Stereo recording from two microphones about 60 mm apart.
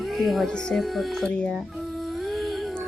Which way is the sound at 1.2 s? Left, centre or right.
Centre.